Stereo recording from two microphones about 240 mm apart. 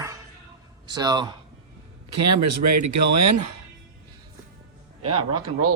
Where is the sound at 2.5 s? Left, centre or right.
Right.